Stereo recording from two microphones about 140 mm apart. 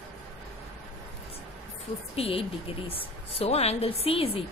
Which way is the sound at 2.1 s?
45° left (ahead or behind).